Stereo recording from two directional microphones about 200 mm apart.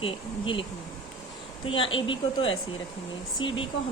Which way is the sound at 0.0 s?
25° left (ahead or behind).